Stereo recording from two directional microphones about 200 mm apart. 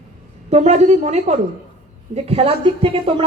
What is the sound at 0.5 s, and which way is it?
A woman's voice, 35° right (ahead or behind).